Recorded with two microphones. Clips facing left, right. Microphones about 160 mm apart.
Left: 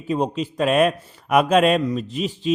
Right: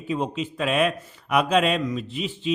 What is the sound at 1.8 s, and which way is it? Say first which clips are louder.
Speech: left 4 dB; 35° left (ahead or behind).